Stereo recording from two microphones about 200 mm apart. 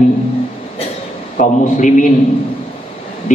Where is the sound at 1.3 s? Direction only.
40° left (ahead or behind).